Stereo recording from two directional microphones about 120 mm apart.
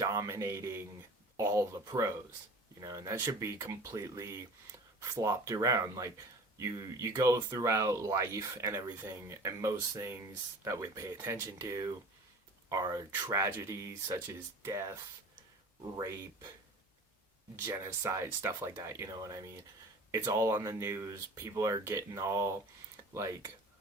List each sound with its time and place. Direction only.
0.0 s speech: 25° right (ahead or behind)
16.0 s speech: 35° right (ahead or behind)
17.6 s speech: 20° right (ahead or behind)